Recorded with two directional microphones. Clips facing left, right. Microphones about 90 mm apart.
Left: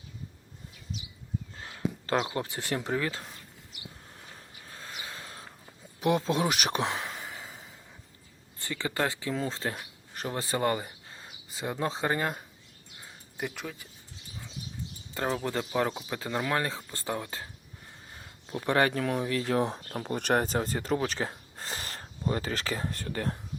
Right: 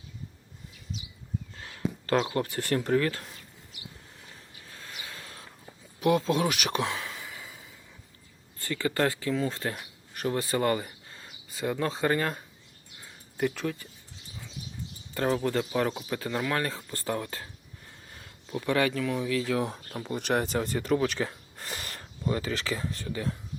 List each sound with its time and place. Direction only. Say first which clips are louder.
1.5 s speech: even; 25° left (ahead or behind)
4.6 s a sound: left 2 dB; 30° left (ahead or behind)
8.5 s speech: right 3 dB; 20° left (ahead or behind)
13.3 s speech: right 7 dB; 10° left (ahead or behind)
15.4 s speech: right 2 dB; 15° left (ahead or behind)
15.9 s speech: right 2 dB; 5° left (ahead or behind)
16.1 s speech: left 1 dB; 20° left (ahead or behind)
18.1 s speech: right 2 dB; 25° left (ahead or behind); by 23.4 s 50° left (ahead or behind)